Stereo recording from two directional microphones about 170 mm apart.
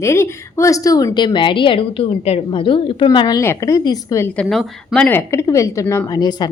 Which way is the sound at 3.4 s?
15° left (ahead or behind).